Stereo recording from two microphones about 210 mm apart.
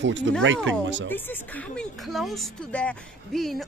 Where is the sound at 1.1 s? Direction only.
10° left (ahead or behind).